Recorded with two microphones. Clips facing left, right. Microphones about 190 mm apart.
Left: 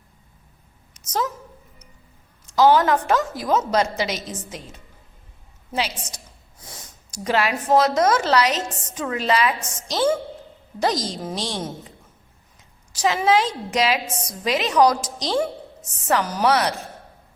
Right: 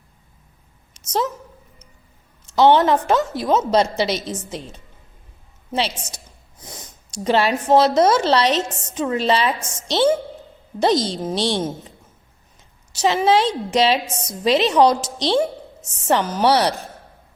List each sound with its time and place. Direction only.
0.9 s a woman's voice: 25° right (ahead or behind)
2.5 s speech: 25° right (ahead or behind)
12.9 s a woman's voice: 25° right (ahead or behind)